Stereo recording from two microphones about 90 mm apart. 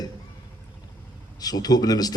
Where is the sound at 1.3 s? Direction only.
45° left (ahead or behind).